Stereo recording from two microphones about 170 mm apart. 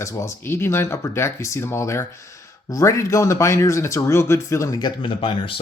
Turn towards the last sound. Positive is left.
turn(degrees=30)  # may be behind; listen again after turning